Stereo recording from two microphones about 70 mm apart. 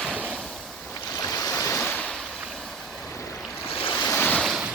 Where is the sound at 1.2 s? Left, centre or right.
Left.